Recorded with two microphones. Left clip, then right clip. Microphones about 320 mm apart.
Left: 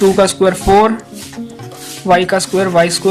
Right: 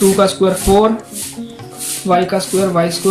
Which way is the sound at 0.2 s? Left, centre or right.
Left.